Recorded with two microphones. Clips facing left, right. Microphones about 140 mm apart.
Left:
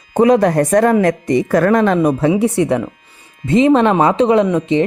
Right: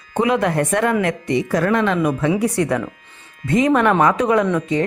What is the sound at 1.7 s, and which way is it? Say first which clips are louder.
Speech: left 5 dB; 40° left (ahead or behind).